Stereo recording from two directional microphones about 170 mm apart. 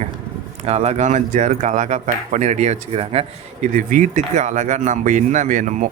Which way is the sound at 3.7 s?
50° right (ahead or behind).